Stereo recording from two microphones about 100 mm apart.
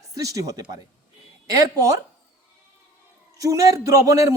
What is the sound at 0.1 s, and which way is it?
Speech, 35° right (ahead or behind).